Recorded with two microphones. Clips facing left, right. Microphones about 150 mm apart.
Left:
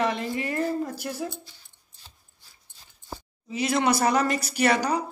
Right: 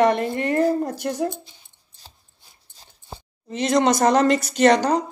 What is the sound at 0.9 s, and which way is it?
Speech, 55° right (ahead or behind).